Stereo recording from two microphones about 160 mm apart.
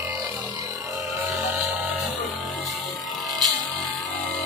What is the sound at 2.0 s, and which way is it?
Music, centre (ahead or behind).